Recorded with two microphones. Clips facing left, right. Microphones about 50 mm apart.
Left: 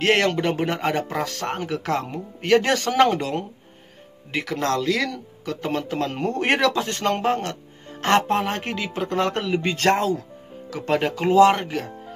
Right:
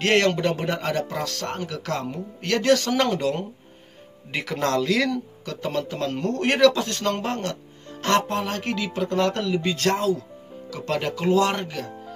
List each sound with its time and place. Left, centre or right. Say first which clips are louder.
0.0 s speech: even; centre
5.4 s speech: left 1 dB; centre
9.3 s speech: left 1 dB; left
10.7 s speech: left 4 dB; left